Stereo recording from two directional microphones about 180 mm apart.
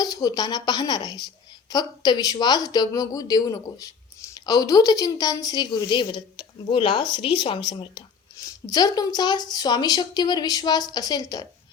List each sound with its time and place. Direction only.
0.0 s speech: 20° left (ahead or behind)